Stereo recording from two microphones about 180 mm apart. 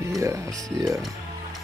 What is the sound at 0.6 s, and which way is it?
Speech, 20° right (ahead or behind).